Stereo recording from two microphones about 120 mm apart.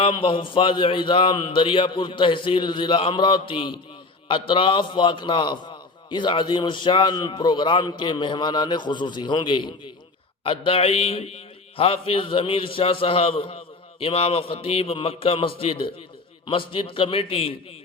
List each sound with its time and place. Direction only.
0.0 s a man's voice: 45° left (ahead or behind)